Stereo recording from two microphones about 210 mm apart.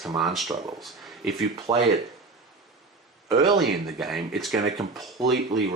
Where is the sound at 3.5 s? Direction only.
50° right (ahead or behind).